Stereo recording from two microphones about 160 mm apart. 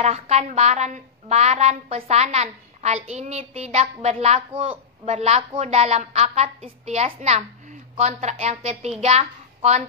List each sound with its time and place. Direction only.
0.0 s a woman's voice: 45° right (ahead or behind)